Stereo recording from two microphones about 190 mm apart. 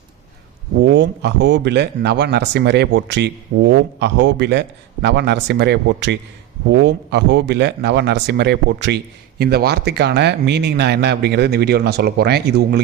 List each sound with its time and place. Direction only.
0.8 s speech: 70° right (ahead or behind)